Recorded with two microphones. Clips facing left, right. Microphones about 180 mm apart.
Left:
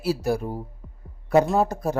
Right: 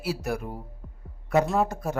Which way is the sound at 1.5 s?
35° left (ahead or behind).